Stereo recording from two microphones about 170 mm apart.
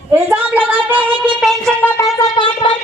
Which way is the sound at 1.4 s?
5° left (ahead or behind).